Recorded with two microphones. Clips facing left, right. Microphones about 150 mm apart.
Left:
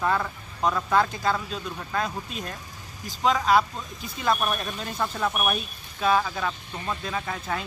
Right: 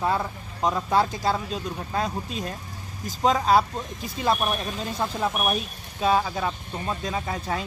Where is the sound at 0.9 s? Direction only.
35° right (ahead or behind).